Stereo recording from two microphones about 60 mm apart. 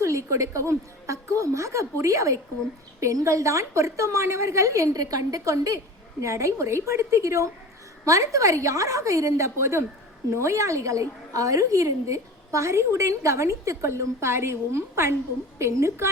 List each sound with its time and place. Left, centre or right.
0.0 s a woman's voice: right
4.9 s a woman's voice: right